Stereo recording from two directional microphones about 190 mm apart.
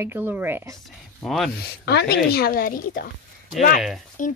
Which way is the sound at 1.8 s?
60° left (ahead or behind).